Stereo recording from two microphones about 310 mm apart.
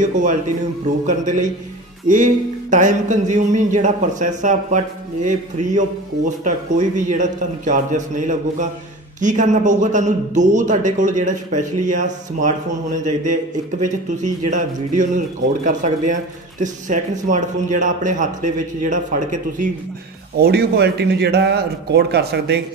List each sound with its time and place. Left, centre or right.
1.0 s a man's voice: right